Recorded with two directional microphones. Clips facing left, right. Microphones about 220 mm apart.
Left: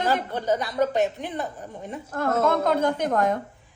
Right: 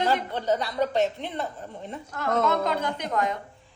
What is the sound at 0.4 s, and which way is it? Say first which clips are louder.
A woman's voice: left 2 dB; 15° left (ahead or behind).